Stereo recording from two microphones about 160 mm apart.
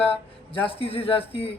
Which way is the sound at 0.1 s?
35° left (ahead or behind).